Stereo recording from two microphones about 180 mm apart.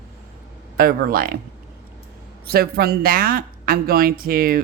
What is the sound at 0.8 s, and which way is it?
Speech, 55° right (ahead or behind).